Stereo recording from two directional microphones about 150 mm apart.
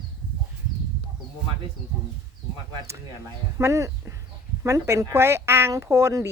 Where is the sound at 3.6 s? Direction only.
20° right (ahead or behind).